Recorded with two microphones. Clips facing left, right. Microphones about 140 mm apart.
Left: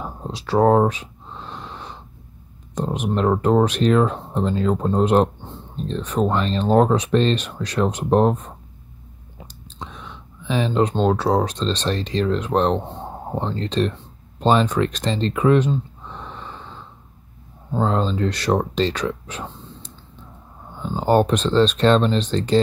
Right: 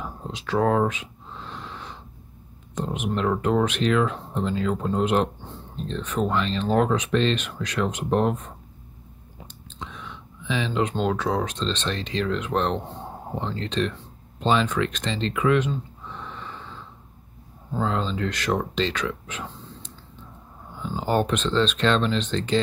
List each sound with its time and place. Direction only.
0.0 s a sound: 35° left (ahead or behind)
2.7 s speech: 40° left (ahead or behind)
9.5 s speech: 35° left (ahead or behind)
17.7 s speech: 40° left (ahead or behind)
20.8 s a sound: 30° left (ahead or behind)
21.1 s speech: 35° left (ahead or behind)